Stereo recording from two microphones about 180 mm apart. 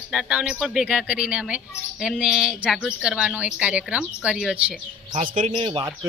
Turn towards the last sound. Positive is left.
turn(degrees=-30)  # may be behind; listen again after turning